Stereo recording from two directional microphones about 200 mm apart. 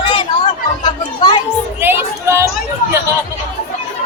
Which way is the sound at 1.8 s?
10° right (ahead or behind).